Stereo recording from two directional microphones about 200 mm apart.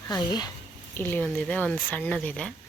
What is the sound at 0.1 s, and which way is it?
Speech, 20° left (ahead or behind).